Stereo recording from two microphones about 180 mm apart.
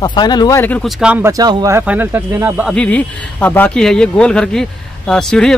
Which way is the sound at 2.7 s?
5° left (ahead or behind).